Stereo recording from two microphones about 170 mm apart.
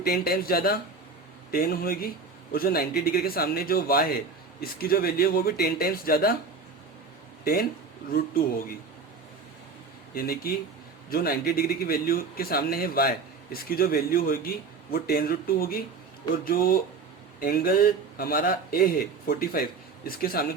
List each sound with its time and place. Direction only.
0.0 s a man's voice: 60° left (ahead or behind)
10.5 s a man's voice: 60° left (ahead or behind)